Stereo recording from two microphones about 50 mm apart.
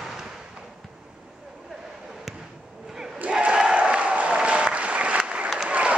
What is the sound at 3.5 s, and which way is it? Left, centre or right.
Applause, centre.